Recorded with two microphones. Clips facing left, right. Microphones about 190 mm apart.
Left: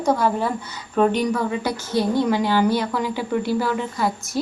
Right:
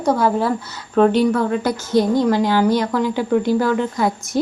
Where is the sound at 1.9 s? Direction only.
15° right (ahead or behind).